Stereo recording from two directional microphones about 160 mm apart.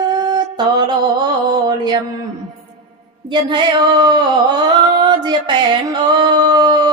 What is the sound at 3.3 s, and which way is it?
Singing, 30° right (ahead or behind).